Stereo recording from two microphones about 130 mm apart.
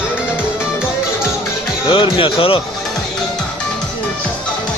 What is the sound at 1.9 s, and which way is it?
Speech, 45° left (ahead or behind).